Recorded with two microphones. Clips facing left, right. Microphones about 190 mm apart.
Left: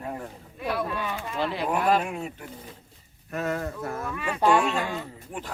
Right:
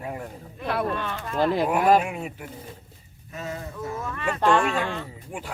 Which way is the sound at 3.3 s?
65° left (ahead or behind).